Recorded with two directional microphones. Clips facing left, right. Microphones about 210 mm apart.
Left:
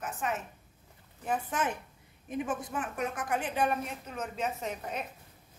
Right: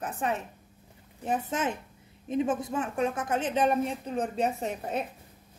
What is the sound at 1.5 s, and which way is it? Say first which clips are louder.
A woman's voice: right 2 dB; 20° right (ahead or behind).